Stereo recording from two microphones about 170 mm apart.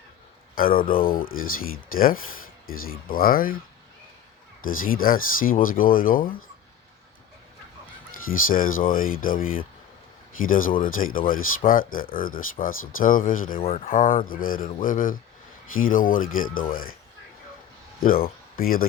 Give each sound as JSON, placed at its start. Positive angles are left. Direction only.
{"t": 0.5, "sound": "speech", "side_deg": 55}
{"t": 2.6, "sound": "speech", "side_deg": 60}
{"t": 4.6, "sound": "speech", "side_deg": 55}
{"t": 8.3, "sound": "speech", "side_deg": 55}
{"t": 18.0, "sound": "speech", "side_deg": 55}